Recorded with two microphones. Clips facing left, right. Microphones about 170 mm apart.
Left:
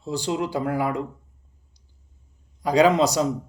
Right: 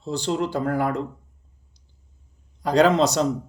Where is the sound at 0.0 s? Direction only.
10° left (ahead or behind).